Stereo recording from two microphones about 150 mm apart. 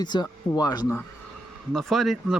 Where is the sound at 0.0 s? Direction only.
30° left (ahead or behind).